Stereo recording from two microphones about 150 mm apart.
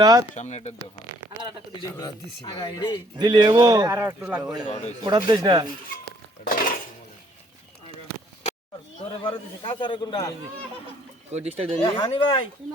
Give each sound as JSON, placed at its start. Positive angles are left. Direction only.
{"t": 0.0, "sound": "speech", "side_deg": -25}
{"t": 0.3, "sound": "speech", "side_deg": 50}
{"t": 2.5, "sound": "speech", "side_deg": 25}
{"t": 3.2, "sound": "speech", "side_deg": -30}
{"t": 4.2, "sound": "speech", "side_deg": -5}
{"t": 5.0, "sound": "speech", "side_deg": -30}
{"t": 6.4, "sound": "dishes", "side_deg": 70}
{"t": 9.2, "sound": "a man's voice", "side_deg": 35}
{"t": 11.3, "sound": "speech", "side_deg": -45}
{"t": 11.9, "sound": "a man's voice", "side_deg": 35}